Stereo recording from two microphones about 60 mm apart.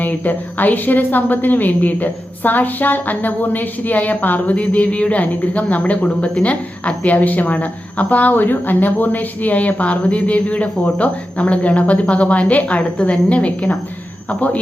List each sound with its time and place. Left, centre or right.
0.0 s a woman's voice: left